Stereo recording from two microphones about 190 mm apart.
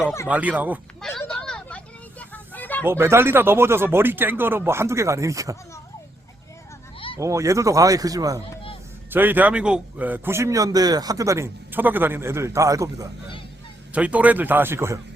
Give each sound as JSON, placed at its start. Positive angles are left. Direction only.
{"t": 0.3, "sound": "a man's voice", "side_deg": -10}
{"t": 1.2, "sound": "a sound", "side_deg": 5}
{"t": 2.8, "sound": "a man's voice", "side_deg": -15}
{"t": 7.2, "sound": "a man's voice", "side_deg": -15}